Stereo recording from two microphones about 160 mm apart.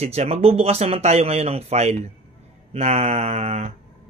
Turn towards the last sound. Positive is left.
turn(degrees=-40)  # may be behind; listen again after turning